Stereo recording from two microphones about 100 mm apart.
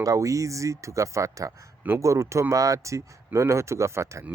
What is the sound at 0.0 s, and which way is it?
Speech, 35° right (ahead or behind).